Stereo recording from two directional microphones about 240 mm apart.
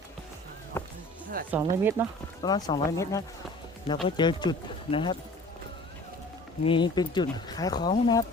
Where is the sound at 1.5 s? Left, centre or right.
Centre.